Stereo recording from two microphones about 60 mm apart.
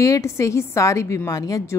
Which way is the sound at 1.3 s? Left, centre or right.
Left.